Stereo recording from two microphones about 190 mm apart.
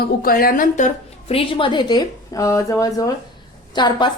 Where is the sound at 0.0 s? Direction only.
50° left (ahead or behind).